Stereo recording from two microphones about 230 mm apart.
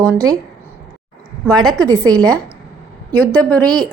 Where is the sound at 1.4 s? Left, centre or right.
Centre.